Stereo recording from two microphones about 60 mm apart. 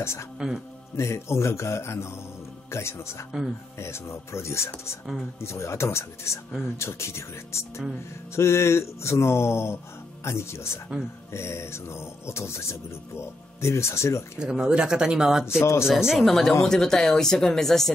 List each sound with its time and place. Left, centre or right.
0.0 s speech: left
14.4 s speech: centre
15.6 s speech: left
15.9 s speech: centre
16.2 s speech: centre